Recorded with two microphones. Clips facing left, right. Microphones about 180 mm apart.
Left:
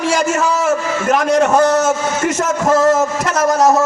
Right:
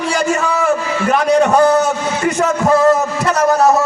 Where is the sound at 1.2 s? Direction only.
40° left (ahead or behind).